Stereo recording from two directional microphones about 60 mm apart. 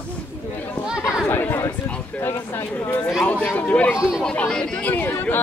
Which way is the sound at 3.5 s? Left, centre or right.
Left.